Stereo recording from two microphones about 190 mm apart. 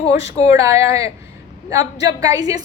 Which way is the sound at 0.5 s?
15° right (ahead or behind).